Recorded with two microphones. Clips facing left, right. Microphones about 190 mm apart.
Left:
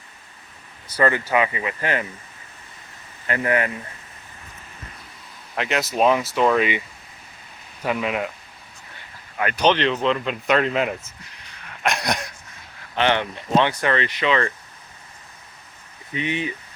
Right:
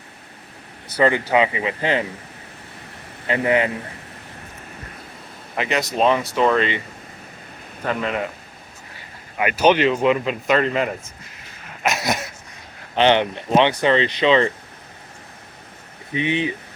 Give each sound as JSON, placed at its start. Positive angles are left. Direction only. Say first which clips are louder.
{"t": 0.9, "sound": "speech", "louder": "right 3 dB", "side_deg": -20}
{"t": 3.2, "sound": "speech", "louder": "right 3 dB", "side_deg": -20}
{"t": 5.5, "sound": "speech", "louder": "right 1 dB", "side_deg": 0}
{"t": 7.9, "sound": "speech", "louder": "even", "side_deg": 5}
{"t": 9.4, "sound": "speech", "louder": "right 3 dB", "side_deg": -10}
{"t": 11.8, "sound": "dog", "louder": "right 1 dB", "side_deg": -5}
{"t": 13.0, "sound": "speech", "louder": "right 5 dB", "side_deg": -25}
{"t": 16.1, "sound": "speech", "louder": "right 4 dB", "side_deg": -20}